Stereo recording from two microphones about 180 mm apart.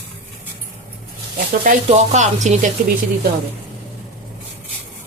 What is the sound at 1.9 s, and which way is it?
Music, 40° right (ahead or behind).